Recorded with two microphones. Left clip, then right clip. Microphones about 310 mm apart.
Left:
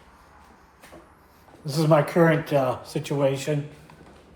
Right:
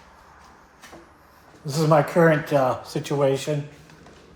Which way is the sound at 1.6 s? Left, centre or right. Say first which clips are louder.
Right 1 dB; centre.